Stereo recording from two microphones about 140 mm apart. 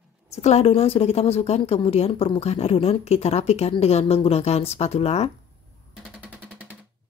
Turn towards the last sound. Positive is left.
turn(degrees=-10)  # may be behind; listen again after turning